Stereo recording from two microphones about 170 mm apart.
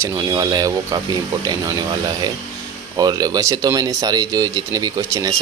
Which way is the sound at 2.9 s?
20° right (ahead or behind).